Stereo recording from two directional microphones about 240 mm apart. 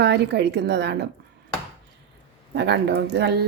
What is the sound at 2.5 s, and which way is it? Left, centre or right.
Speech, right.